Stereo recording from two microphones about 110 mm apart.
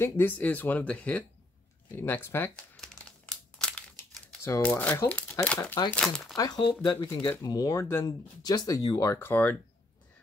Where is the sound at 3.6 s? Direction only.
10° left (ahead or behind).